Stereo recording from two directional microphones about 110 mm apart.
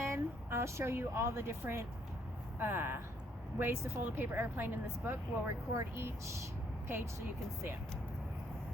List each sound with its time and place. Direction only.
0.0 s a woman's voice: 25° right (ahead or behind)